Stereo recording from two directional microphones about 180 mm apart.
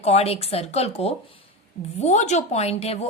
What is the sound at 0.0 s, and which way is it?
A woman's voice, 35° left (ahead or behind).